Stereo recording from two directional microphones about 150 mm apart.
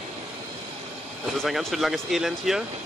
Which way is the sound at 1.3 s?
Centre (ahead or behind).